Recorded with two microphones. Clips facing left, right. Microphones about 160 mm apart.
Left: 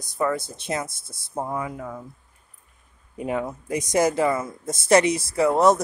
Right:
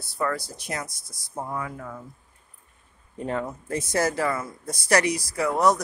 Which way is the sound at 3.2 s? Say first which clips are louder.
Left 2 dB; 10° left (ahead or behind).